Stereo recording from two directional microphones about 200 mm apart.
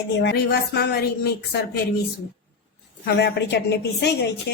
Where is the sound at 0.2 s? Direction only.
55° left (ahead or behind).